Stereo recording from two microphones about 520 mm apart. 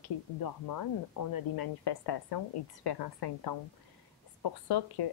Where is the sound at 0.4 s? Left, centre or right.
Left.